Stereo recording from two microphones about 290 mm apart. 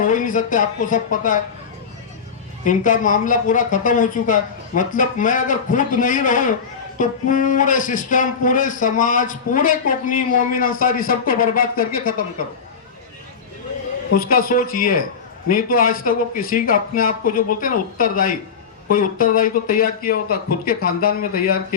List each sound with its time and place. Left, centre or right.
0.0 s speech: left
2.6 s speech: left
14.1 s speech: left